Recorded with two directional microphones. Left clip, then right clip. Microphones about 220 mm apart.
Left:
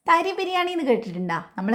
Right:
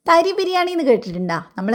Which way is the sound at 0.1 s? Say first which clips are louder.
Right 5 dB; 20° right (ahead or behind).